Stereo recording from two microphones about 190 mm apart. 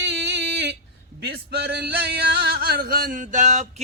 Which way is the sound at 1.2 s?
55° right (ahead or behind).